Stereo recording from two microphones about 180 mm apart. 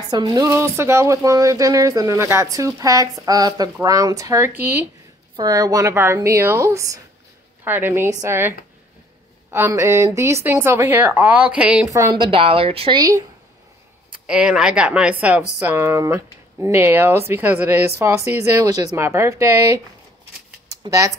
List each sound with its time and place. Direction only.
0.1 s speech: 20° right (ahead or behind)
5.3 s speech: 20° right (ahead or behind); by 11.9 s 5° right (ahead or behind)
11.9 s a woman's voice: 25° right (ahead or behind)
14.1 s speech: 5° right (ahead or behind)
20.8 s speech: 20° right (ahead or behind)